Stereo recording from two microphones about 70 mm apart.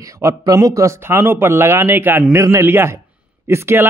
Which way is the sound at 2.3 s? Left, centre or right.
Right.